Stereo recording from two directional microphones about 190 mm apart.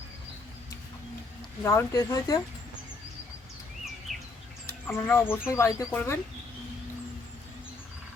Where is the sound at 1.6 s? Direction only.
15° left (ahead or behind).